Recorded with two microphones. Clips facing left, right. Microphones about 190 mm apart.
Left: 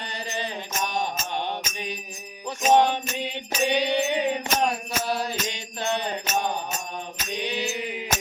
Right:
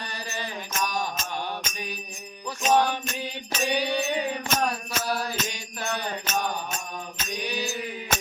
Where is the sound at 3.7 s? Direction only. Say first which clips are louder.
Left 2 dB; 25° left (ahead or behind).